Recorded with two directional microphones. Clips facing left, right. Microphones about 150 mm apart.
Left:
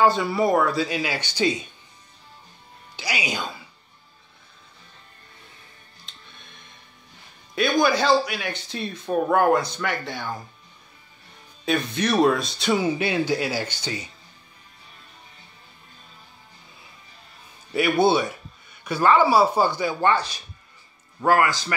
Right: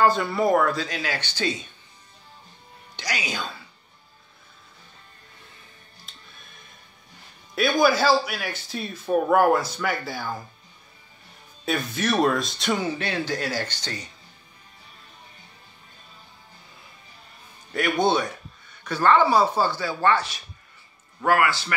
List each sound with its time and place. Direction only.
0.0 s speech: centre (ahead or behind)
3.0 s speech: 10° left (ahead or behind)
6.0 s music: centre (ahead or behind)
7.5 s speech: 5° right (ahead or behind)
11.6 s speech: centre (ahead or behind)
17.7 s speech: 5° left (ahead or behind)
21.3 s speech: 40° left (ahead or behind)